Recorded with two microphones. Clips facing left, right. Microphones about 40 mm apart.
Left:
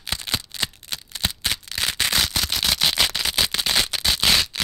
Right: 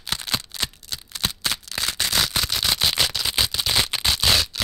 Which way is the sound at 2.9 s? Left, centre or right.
Left.